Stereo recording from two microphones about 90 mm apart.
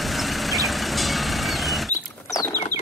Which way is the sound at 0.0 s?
Centre (ahead or behind).